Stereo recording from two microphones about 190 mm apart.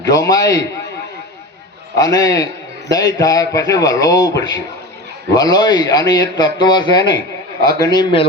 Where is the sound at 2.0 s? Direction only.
20° left (ahead or behind).